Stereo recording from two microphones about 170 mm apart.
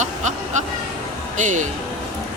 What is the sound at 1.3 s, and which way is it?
Speech, 45° right (ahead or behind).